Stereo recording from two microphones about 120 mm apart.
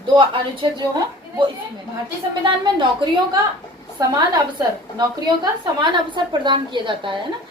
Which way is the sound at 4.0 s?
30° right (ahead or behind).